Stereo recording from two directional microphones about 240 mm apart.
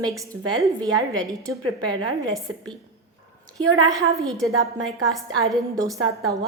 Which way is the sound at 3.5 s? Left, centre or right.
Right.